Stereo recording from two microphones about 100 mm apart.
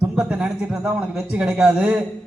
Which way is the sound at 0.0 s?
10° right (ahead or behind).